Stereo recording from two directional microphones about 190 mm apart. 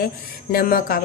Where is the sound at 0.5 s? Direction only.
50° left (ahead or behind).